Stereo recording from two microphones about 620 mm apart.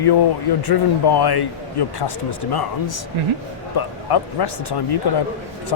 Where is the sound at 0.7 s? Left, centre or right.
Left.